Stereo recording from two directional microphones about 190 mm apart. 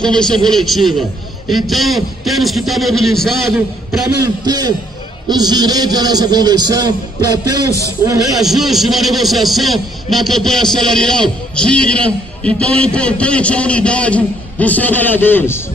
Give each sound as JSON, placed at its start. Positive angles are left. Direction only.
{"t": 0.0, "sound": "a man's voice", "side_deg": 5}
{"t": 4.5, "sound": "a man's voice", "side_deg": -20}
{"t": 8.4, "sound": "a man's voice", "side_deg": 0}